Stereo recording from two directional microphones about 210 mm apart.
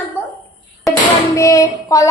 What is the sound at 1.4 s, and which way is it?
Speech, 15° left (ahead or behind).